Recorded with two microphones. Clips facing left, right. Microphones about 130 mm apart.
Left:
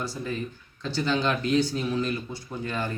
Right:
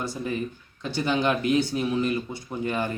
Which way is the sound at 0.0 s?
20° right (ahead or behind).